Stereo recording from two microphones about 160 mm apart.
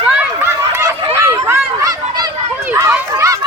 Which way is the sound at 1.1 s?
15° right (ahead or behind).